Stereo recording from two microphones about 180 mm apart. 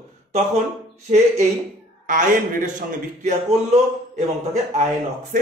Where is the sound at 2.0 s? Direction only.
45° right (ahead or behind).